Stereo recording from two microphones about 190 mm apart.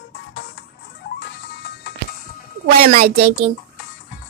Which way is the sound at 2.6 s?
50° right (ahead or behind).